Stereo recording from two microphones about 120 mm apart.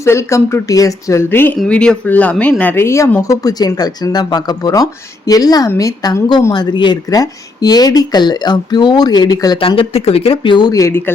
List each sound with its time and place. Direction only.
0.0 s speech: 25° left (ahead or behind)
1.5 s speech: 5° left (ahead or behind); by 9.6 s 35° left (ahead or behind)
9.6 s speech: 50° left (ahead or behind); by 11.1 s 20° left (ahead or behind)